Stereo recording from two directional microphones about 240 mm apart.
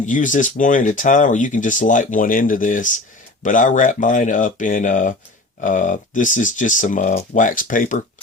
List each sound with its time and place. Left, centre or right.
0.0 s speech: left